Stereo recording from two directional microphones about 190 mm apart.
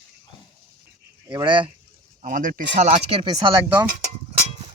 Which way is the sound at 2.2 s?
45° right (ahead or behind).